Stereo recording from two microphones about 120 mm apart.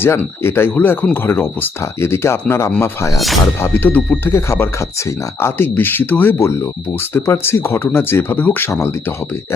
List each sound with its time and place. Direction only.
0.0 s speech: 20° left (ahead or behind)